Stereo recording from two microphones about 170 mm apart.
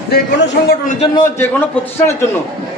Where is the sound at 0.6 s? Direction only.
70° left (ahead or behind).